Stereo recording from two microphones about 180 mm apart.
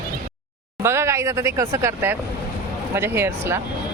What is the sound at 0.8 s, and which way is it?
Speech, 15° right (ahead or behind).